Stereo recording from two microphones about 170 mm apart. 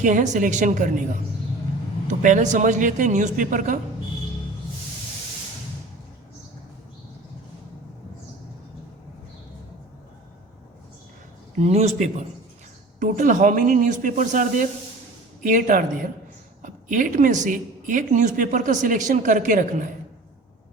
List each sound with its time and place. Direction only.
0.0 s a woman's voice: 50° right (ahead or behind)
2.0 s a woman's voice: 50° right (ahead or behind)
11.6 s a woman's voice: 40° right (ahead or behind)